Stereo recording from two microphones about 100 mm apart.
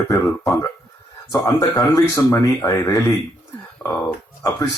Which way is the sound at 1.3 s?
30° left (ahead or behind).